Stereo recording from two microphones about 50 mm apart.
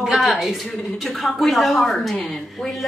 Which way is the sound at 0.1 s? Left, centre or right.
Centre.